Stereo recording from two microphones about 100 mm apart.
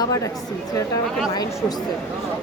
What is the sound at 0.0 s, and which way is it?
Speech, 40° left (ahead or behind).